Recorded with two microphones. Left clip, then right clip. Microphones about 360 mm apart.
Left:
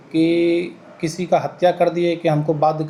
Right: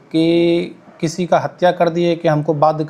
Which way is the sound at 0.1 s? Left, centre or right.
Right.